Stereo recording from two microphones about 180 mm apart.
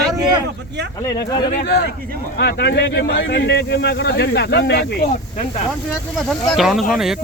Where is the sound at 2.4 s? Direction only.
65° left (ahead or behind).